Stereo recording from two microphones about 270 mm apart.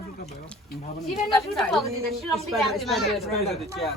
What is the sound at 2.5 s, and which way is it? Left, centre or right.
Speech, centre.